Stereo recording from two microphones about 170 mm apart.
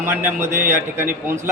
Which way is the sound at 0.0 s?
10° right (ahead or behind).